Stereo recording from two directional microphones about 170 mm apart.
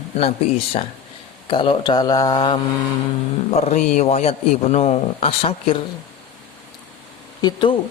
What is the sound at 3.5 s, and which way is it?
A man's voice, 40° left (ahead or behind).